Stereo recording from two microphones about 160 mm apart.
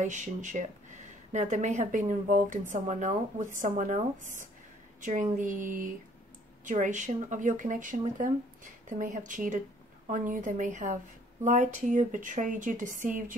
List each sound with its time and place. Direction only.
0.0 s speech: 50° right (ahead or behind)